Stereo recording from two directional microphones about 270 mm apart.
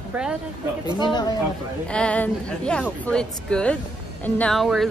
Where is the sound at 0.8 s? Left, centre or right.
Centre.